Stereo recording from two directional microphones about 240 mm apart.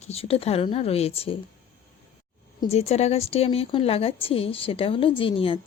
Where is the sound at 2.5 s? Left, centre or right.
Left.